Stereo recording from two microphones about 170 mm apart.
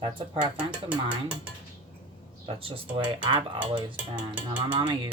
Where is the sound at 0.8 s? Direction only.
10° right (ahead or behind).